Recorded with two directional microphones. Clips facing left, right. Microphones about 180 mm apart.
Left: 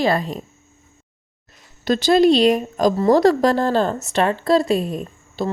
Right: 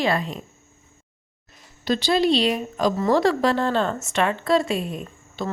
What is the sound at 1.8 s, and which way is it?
Speech, 45° left (ahead or behind).